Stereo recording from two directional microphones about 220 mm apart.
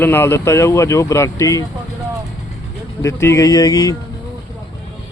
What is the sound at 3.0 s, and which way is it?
Speech, 15° left (ahead or behind).